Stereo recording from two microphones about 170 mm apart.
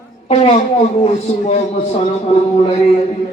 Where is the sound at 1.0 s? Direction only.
40° left (ahead or behind).